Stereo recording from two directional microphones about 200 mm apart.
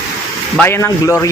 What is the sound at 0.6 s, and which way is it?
Speech, 10° left (ahead or behind).